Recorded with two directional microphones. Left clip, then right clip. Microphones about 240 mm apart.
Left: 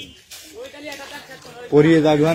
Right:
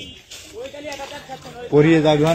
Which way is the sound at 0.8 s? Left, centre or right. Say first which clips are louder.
Right 1 dB; left.